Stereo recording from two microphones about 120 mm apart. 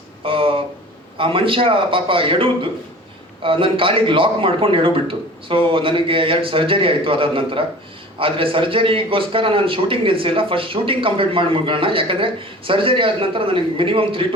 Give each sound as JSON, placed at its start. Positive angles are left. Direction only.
{"t": 0.3, "sound": "a man's voice", "side_deg": -50}